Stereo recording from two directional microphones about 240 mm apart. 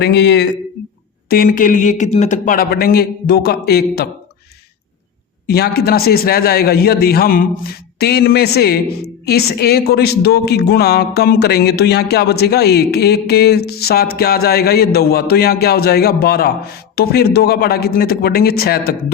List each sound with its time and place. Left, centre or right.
0.0 s a woman's voice: left
5.5 s a woman's voice: left